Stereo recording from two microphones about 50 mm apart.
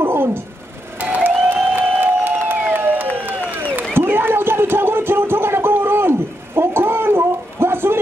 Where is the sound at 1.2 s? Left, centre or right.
Right.